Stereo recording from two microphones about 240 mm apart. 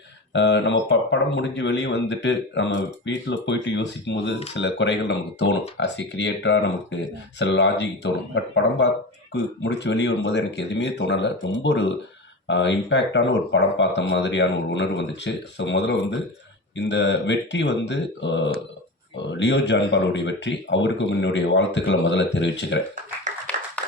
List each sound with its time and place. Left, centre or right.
0.3 s speech: left
9.3 s speech: left